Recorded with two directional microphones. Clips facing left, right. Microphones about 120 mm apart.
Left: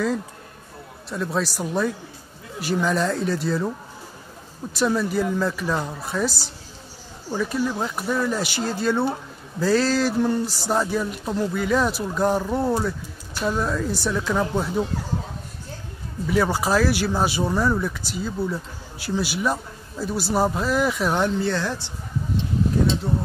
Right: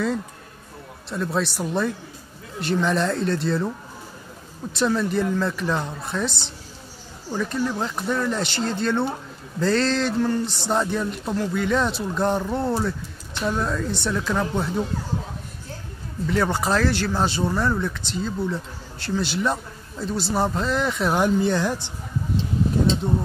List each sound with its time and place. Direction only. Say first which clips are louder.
1.1 s speech: even; centre (ahead or behind)
4.7 s speech: even; 5° left (ahead or behind)
10.2 s speech: left 1 dB; 15° left (ahead or behind)
10.5 s speech: even; 5° left (ahead or behind)
16.3 s speech: left 1 dB; 5° left (ahead or behind)
21.2 s speech: right 2 dB; 15° right (ahead or behind)